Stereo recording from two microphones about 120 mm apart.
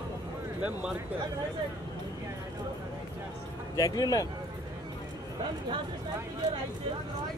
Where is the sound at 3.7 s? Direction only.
30° left (ahead or behind).